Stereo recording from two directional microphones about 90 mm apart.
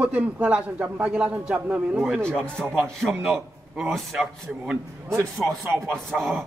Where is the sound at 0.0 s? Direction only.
10° right (ahead or behind).